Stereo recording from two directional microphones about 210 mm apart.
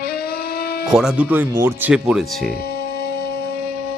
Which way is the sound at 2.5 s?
45° left (ahead or behind).